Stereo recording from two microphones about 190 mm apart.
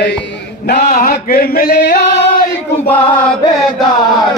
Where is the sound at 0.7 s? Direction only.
50° left (ahead or behind).